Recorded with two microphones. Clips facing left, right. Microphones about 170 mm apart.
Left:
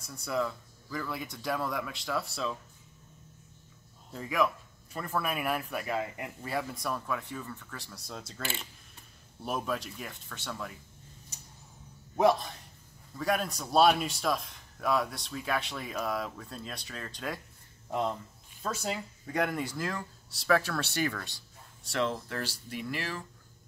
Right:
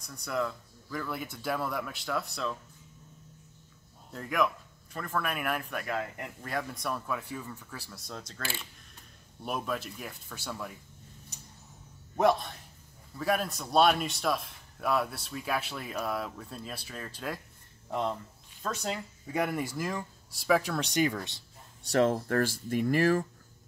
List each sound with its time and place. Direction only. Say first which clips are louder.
0.0 s speech: even; 5° left (ahead or behind)
4.1 s speech: even; centre (ahead or behind)
8.1 s speech: even; 5° left (ahead or behind)
9.4 s speech: even; centre (ahead or behind)
12.2 s speech: left 1 dB; centre (ahead or behind)
18.6 s speech: even; 5° left (ahead or behind); by 21.4 s 20° right (ahead or behind)
21.8 s speech: right 6 dB; 45° right (ahead or behind)